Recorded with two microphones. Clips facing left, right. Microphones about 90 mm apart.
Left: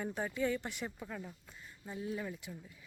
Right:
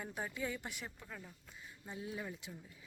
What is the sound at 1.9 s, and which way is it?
Speech, 15° right (ahead or behind).